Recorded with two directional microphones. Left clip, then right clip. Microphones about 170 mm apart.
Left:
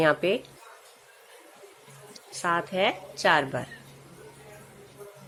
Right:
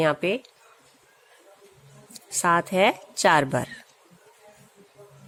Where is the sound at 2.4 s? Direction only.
40° right (ahead or behind).